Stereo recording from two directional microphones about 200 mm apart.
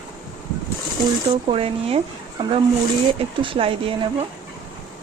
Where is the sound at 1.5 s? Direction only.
30° right (ahead or behind).